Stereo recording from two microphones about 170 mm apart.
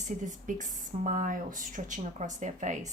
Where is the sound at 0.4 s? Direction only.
50° right (ahead or behind).